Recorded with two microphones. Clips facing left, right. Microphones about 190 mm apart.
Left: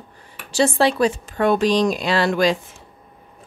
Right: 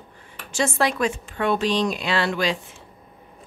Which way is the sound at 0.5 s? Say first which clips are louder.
Left 5 dB; 30° left (ahead or behind).